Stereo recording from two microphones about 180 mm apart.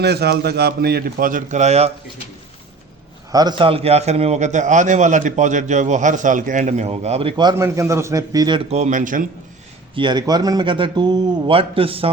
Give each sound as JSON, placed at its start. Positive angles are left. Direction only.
{"t": 0.0, "sound": "a man's voice", "side_deg": -65}
{"t": 3.3, "sound": "a man's voice", "side_deg": -25}
{"t": 8.7, "sound": "speech", "side_deg": -40}
{"t": 9.9, "sound": "speech", "side_deg": -25}